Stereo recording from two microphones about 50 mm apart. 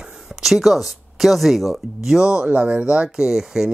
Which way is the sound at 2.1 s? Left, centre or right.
Centre.